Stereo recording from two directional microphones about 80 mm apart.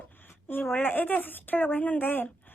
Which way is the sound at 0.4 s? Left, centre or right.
Left.